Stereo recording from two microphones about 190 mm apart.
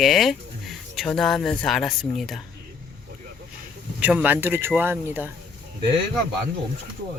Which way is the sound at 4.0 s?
5° right (ahead or behind).